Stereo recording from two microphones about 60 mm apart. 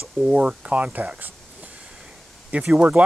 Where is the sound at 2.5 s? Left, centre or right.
Right.